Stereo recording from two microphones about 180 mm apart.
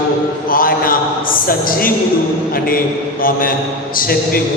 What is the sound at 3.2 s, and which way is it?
A man's voice, 50° left (ahead or behind).